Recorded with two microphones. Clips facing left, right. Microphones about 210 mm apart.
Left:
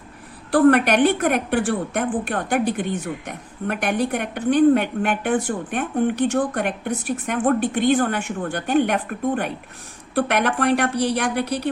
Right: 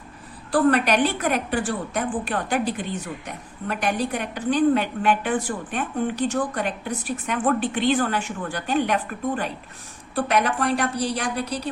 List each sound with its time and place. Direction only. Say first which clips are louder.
0.5 s a woman's voice: left 4 dB; 55° left (ahead or behind)